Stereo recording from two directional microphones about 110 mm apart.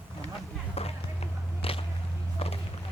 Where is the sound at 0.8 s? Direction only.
65° left (ahead or behind).